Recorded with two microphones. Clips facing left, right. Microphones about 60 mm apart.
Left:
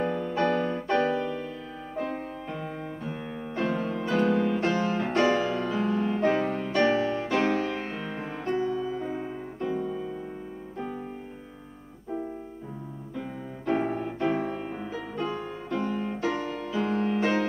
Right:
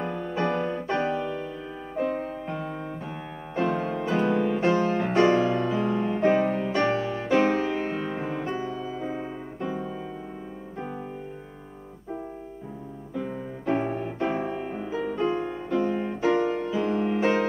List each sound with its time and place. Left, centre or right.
0.2 s music: centre
0.5 s music: centre
8.8 s piano: centre
13.1 s music: centre